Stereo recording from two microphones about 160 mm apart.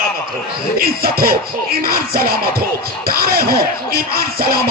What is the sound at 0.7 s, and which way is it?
Speech, 65° right (ahead or behind).